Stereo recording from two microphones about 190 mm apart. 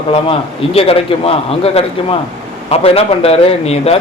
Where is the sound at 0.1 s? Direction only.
30° left (ahead or behind).